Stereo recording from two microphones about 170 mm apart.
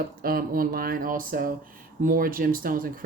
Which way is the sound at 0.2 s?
60° right (ahead or behind).